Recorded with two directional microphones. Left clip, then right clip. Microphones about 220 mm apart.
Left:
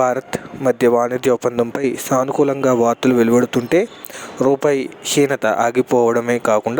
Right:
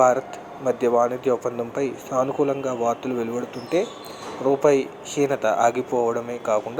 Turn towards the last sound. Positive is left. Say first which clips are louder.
# left 8 dB
turn(degrees=45)  # may be behind; listen again after turning